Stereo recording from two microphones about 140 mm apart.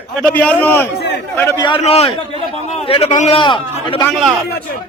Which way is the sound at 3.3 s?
40° left (ahead or behind).